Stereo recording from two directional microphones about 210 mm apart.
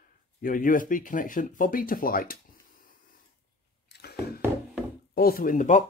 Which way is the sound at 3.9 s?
50° left (ahead or behind).